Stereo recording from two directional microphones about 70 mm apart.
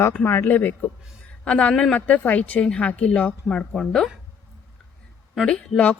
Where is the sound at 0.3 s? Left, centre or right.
Left; by 4.1 s centre.